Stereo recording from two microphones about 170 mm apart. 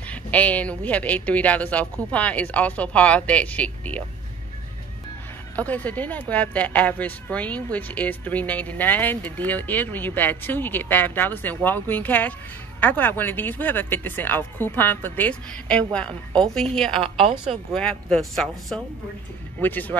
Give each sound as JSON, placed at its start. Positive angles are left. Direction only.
{"t": 0.1, "sound": "a woman's voice", "side_deg": 10}
{"t": 5.6, "sound": "a woman's voice", "side_deg": 10}
{"t": 17.0, "sound": "a woman's voice", "side_deg": -35}
{"t": 17.7, "sound": "a woman's voice", "side_deg": 5}